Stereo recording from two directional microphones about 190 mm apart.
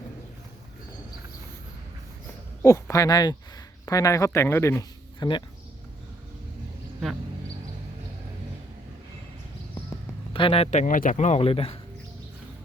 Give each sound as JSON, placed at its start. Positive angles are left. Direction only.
{"t": 2.6, "sound": "speech", "side_deg": 15}
{"t": 10.3, "sound": "a man's voice", "side_deg": 30}